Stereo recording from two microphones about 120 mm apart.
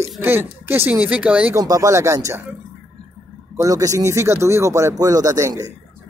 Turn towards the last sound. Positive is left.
turn(degrees=-30)  # may be behind; listen again after turning